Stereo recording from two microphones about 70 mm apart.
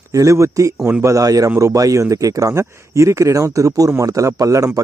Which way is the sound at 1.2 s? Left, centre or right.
Right.